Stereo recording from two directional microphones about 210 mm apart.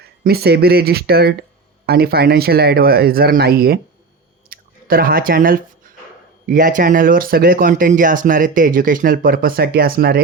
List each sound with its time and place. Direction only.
0.0 s speech: 50° right (ahead or behind)
4.4 s chewing: 45° right (ahead or behind)
6.5 s speech: 40° right (ahead or behind)